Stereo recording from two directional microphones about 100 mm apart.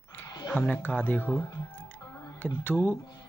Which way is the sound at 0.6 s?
15° left (ahead or behind).